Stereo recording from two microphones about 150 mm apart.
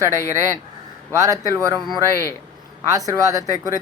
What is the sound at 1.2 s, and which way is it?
Speech, 25° right (ahead or behind).